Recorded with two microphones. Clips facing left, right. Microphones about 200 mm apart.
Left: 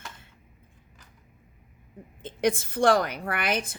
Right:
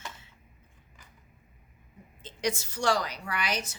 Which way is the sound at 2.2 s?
55° left (ahead or behind).